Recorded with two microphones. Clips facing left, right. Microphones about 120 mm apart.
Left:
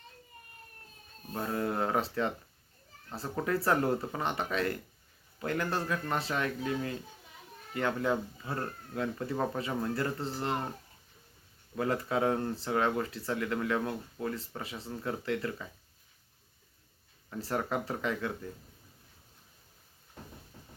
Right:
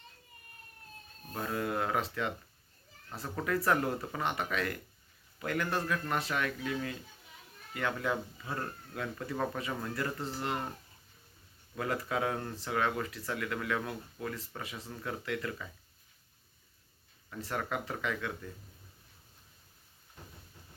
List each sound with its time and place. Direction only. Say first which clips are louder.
1.3 s speech: left 2 dB; 20° left (ahead or behind)
3.2 s speech: left 2 dB; 30° left (ahead or behind)
11.8 s speech: left 3 dB; 25° left (ahead or behind)
17.3 s speech: left 3 dB; 30° left (ahead or behind)